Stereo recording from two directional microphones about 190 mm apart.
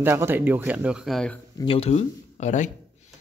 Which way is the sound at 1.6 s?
30° left (ahead or behind).